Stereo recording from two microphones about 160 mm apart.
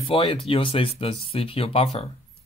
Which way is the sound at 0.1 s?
35° left (ahead or behind).